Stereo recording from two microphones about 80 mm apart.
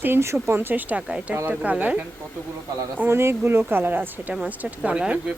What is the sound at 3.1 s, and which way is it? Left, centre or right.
Speech, right.